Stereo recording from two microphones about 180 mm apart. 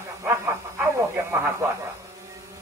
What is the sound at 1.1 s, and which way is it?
Speech, 15° right (ahead or behind).